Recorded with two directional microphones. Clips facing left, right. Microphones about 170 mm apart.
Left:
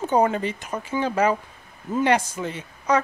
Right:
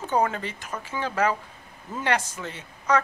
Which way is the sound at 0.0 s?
20° left (ahead or behind).